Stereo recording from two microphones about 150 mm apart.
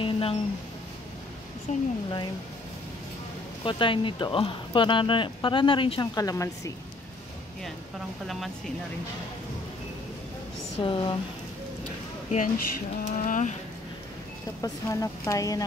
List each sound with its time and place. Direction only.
0.0 s a sound: 40° left (ahead or behind)
1.7 s speech: 50° left (ahead or behind)
3.6 s speech: 35° left (ahead or behind)
10.8 s speech: 35° left (ahead or behind)
12.3 s speech: 65° left (ahead or behind)
13.0 s a sound: 60° left (ahead or behind)
14.6 s speech: 20° left (ahead or behind)